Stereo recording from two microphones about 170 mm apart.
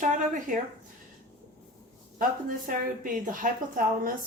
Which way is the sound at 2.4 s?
55° right (ahead or behind).